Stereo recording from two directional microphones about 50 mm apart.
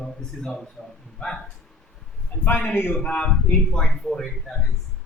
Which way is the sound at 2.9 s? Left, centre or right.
Left.